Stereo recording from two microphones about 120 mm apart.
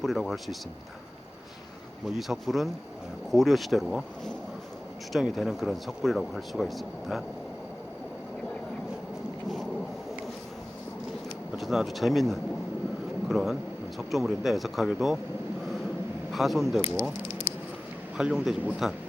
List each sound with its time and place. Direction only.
0.0 s speech: centre (ahead or behind)
2.0 s speech: centre (ahead or behind)
11.5 s speech: centre (ahead or behind)
16.3 s speech: centre (ahead or behind)
18.2 s speech: 5° right (ahead or behind)